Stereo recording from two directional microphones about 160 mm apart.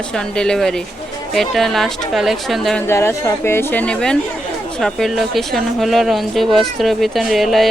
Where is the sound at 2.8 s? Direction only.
15° left (ahead or behind); by 7.6 s centre (ahead or behind).